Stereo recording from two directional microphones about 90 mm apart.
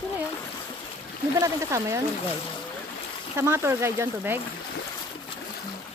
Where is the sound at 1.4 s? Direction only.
35° right (ahead or behind).